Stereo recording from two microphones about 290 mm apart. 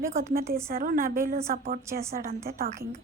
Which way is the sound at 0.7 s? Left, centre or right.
Right.